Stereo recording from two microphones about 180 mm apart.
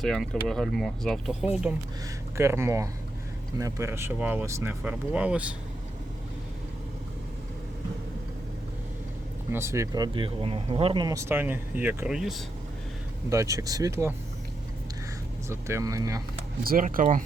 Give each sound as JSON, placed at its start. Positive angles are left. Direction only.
{"t": 0.0, "sound": "speech", "side_deg": 0}
{"t": 9.5, "sound": "speech", "side_deg": -15}
{"t": 13.3, "sound": "speech", "side_deg": -15}
{"t": 15.4, "sound": "speech", "side_deg": -15}
{"t": 16.6, "sound": "speech", "side_deg": -50}